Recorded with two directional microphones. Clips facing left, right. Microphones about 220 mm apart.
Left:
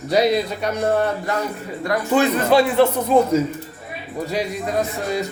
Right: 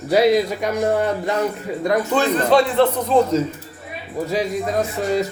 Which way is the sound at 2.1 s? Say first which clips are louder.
Left 2 dB; 10° left (ahead or behind).